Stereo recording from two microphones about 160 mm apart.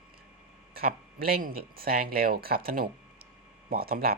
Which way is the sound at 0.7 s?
70° right (ahead or behind).